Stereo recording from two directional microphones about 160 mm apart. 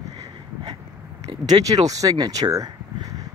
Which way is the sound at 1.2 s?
25° right (ahead or behind).